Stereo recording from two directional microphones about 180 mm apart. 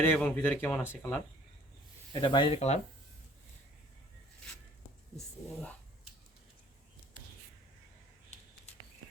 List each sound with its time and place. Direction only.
0.0 s speech: 10° left (ahead or behind)
2.2 s speech: 25° left (ahead or behind)